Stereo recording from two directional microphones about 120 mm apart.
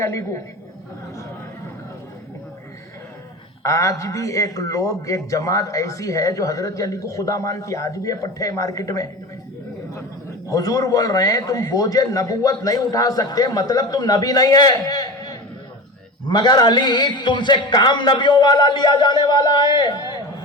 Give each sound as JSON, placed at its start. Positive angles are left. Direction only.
{"t": 0.0, "sound": "a man's voice", "side_deg": 25}
{"t": 3.6, "sound": "a man's voice", "side_deg": 25}
{"t": 10.5, "sound": "a man's voice", "side_deg": 30}